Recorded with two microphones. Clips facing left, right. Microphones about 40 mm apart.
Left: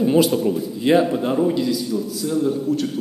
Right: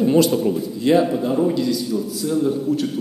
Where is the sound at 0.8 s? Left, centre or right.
Centre.